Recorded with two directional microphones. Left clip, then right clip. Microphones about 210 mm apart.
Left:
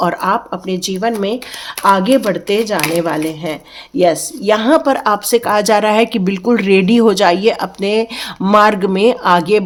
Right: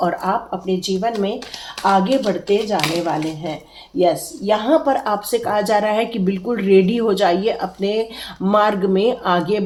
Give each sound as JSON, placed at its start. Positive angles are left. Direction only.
{"t": 0.0, "sound": "a woman's voice", "side_deg": 40}